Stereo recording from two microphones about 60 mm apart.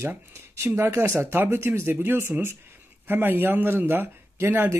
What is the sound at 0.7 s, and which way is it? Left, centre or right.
Speech, right.